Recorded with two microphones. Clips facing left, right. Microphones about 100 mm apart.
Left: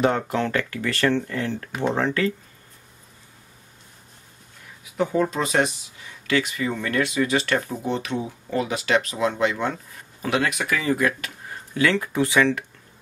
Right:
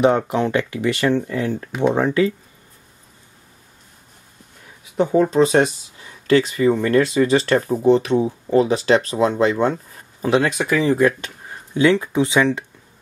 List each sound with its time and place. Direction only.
0.0 s speech: 20° right (ahead or behind)
4.9 s speech: 30° right (ahead or behind)